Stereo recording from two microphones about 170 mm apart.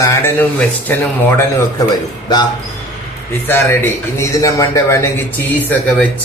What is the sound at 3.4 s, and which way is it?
A man's voice, 15° left (ahead or behind).